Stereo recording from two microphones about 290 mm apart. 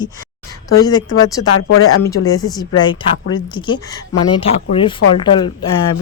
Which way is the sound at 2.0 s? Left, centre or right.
Centre.